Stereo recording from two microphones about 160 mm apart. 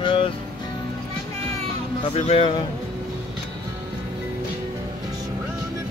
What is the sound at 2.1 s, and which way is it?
Speech, 35° left (ahead or behind).